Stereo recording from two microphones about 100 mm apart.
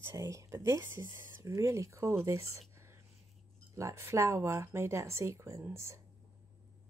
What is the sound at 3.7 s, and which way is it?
Speech, 30° right (ahead or behind).